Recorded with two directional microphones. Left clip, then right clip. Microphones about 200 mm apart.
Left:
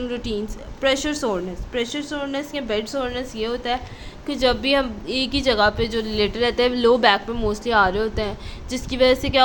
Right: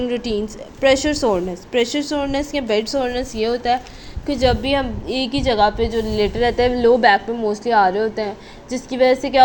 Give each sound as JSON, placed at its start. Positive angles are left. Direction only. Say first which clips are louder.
{"t": 0.0, "sound": "a woman's voice", "louder": "right 5 dB", "side_deg": -15}
{"t": 4.3, "sound": "a woman's voice", "louder": "right 2 dB", "side_deg": -5}